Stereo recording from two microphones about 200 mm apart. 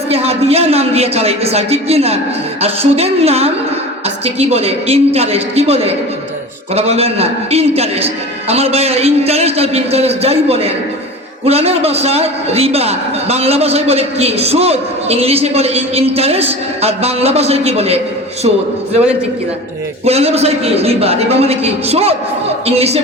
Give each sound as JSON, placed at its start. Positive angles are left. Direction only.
{"t": 0.1, "sound": "a man's voice", "side_deg": -30}
{"t": 20.1, "sound": "a man's voice", "side_deg": -30}